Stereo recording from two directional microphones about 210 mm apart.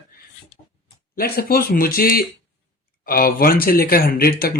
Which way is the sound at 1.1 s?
45° left (ahead or behind).